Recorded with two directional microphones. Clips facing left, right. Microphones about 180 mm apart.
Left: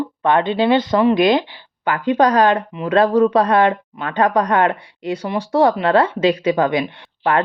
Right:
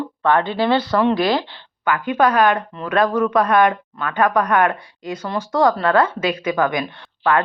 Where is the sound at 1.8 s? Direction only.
30° left (ahead or behind).